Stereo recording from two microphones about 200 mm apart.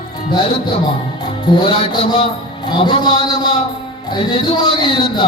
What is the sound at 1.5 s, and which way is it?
Speech, 25° left (ahead or behind).